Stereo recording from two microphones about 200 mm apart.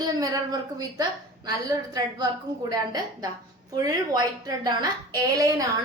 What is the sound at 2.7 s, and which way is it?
A woman's voice, 20° right (ahead or behind).